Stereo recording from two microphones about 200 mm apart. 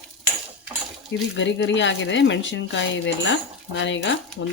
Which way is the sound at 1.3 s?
65° left (ahead or behind).